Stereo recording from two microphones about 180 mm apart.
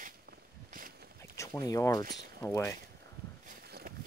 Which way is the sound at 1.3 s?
20° left (ahead or behind).